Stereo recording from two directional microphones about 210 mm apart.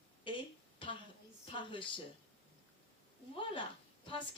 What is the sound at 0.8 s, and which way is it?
Speech, 25° left (ahead or behind).